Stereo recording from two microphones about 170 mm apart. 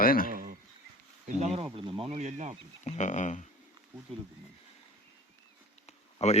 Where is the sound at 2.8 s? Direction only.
45° left (ahead or behind).